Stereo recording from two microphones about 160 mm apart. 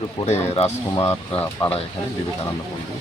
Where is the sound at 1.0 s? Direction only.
15° left (ahead or behind).